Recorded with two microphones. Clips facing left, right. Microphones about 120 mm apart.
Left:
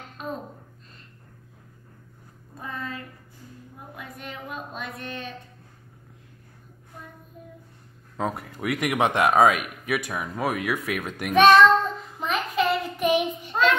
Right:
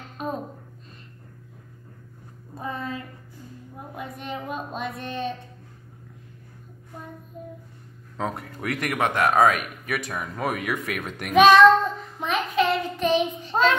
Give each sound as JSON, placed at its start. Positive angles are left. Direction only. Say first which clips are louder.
{"t": 2.6, "sound": "a sound", "louder": "right 3 dB", "side_deg": -20}
{"t": 8.2, "sound": "speech", "louder": "left 1 dB", "side_deg": 5}
{"t": 8.7, "sound": "speech", "louder": "left 2 dB", "side_deg": 15}
{"t": 11.3, "sound": "child singing", "louder": "right 1 dB", "side_deg": 0}